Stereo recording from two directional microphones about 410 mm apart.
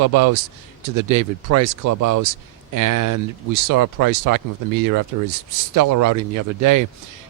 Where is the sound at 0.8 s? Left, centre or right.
Right.